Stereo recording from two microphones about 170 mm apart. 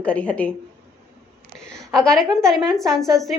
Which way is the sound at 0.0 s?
10° left (ahead or behind).